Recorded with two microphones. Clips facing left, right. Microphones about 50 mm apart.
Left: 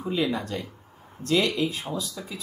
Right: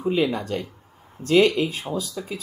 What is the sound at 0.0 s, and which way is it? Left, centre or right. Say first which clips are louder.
Speech: right 4 dB; right.